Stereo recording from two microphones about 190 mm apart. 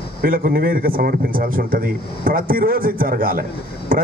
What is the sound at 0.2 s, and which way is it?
A man's voice, 50° right (ahead or behind).